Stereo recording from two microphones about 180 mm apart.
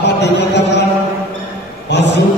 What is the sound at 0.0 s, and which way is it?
Chant, 70° left (ahead or behind).